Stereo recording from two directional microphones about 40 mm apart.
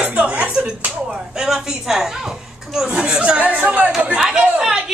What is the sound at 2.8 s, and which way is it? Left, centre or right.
Speech, right.